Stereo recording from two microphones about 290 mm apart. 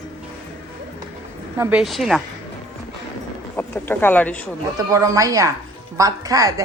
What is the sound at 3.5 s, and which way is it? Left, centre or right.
Speech, centre.